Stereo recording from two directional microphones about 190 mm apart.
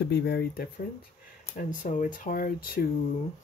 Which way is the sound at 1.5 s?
45° left (ahead or behind).